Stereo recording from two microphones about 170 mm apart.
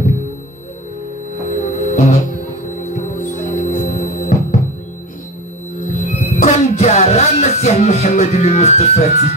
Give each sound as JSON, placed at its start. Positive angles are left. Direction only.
{"t": 1.5, "sound": "music", "side_deg": 45}
{"t": 5.9, "sound": "music", "side_deg": 50}